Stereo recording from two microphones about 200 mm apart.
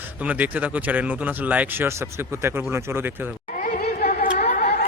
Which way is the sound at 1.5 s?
5° right (ahead or behind).